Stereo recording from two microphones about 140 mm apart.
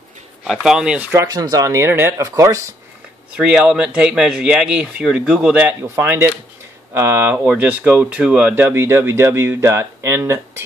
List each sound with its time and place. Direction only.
0.5 s speech: centre (ahead or behind)
1.2 s speech: 30° right (ahead or behind)
3.3 s speech: 5° right (ahead or behind)